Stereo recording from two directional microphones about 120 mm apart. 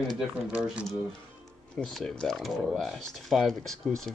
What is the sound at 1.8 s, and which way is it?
Speech, 5° left (ahead or behind).